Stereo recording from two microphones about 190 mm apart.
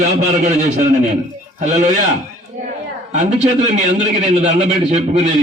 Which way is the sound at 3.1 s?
35° right (ahead or behind).